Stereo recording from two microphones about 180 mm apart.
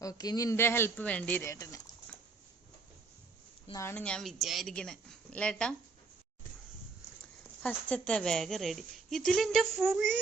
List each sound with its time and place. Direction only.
0.0 s speech: 20° left (ahead or behind)
3.7 s a woman's voice: 15° left (ahead or behind)
7.6 s a woman's voice: 10° left (ahead or behind)